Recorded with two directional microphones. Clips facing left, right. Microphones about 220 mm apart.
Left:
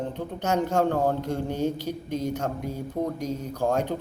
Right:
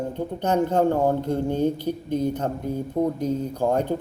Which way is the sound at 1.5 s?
55° right (ahead or behind).